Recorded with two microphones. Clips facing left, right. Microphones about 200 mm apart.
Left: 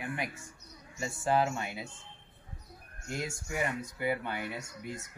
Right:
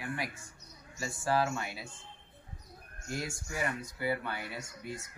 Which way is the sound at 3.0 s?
20° left (ahead or behind).